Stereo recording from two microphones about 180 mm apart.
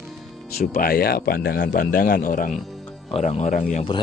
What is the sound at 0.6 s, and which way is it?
Speech, 55° left (ahead or behind).